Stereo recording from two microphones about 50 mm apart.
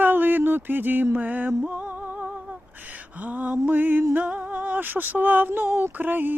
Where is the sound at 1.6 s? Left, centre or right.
Right.